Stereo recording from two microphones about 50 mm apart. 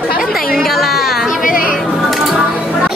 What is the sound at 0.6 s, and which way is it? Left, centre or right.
Music, centre.